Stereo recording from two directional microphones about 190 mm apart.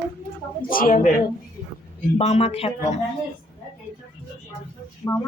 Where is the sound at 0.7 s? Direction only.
50° left (ahead or behind).